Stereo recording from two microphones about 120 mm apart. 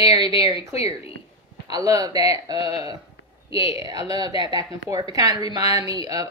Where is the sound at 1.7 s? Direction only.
30° right (ahead or behind).